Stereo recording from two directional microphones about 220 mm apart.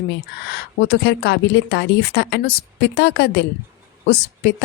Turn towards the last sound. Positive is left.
turn(degrees=50)  # may be behind; listen again after turning